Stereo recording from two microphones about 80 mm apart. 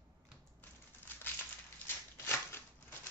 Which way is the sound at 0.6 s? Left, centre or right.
Left.